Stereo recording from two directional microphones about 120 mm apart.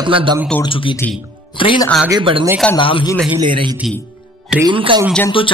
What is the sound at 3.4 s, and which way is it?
A man's voice, 45° right (ahead or behind).